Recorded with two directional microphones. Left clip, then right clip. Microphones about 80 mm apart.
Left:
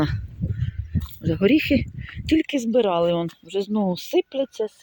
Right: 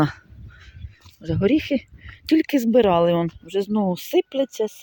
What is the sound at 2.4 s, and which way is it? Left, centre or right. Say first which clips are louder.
Speech: right 3 dB; right.